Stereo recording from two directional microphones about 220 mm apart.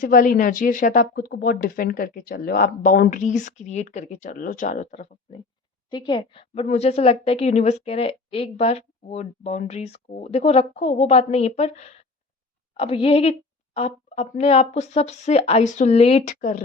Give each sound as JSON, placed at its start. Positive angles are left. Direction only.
{"t": 0.0, "sound": "speech", "side_deg": 40}
{"t": 5.9, "sound": "a woman's voice", "side_deg": 20}